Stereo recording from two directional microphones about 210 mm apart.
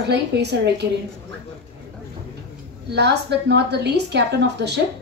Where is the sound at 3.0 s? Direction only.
55° right (ahead or behind).